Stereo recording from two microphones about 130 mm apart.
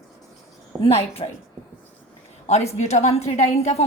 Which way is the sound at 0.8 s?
50° left (ahead or behind).